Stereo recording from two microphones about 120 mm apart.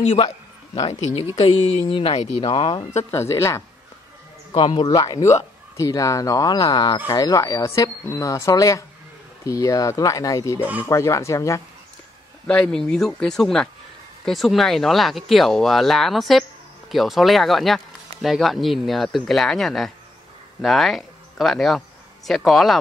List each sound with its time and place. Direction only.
1.4 s speech: 45° left (ahead or behind)
2.9 s speech: 25° left (ahead or behind)
4.6 s speech: 40° left (ahead or behind)
7.1 s speech: 30° left (ahead or behind)
12.4 s speech: 5° left (ahead or behind)